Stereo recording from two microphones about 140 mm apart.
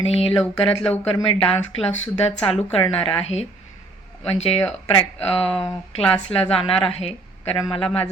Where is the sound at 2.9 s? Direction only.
40° left (ahead or behind).